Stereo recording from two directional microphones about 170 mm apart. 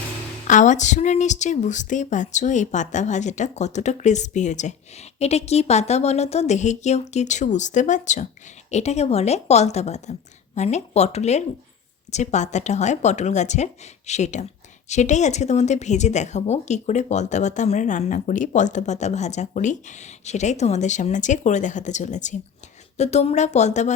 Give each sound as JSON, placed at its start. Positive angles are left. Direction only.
{"t": 0.4, "sound": "a woman's voice", "side_deg": 45}